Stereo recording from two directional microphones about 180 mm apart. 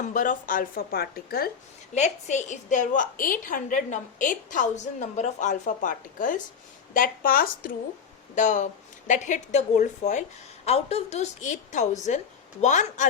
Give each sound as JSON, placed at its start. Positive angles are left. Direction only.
{"t": 0.0, "sound": "a woman's voice", "side_deg": 45}
{"t": 2.0, "sound": "a woman's voice", "side_deg": 40}
{"t": 8.4, "sound": "a woman's voice", "side_deg": 45}